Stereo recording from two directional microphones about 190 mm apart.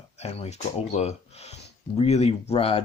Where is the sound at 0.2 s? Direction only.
35° left (ahead or behind).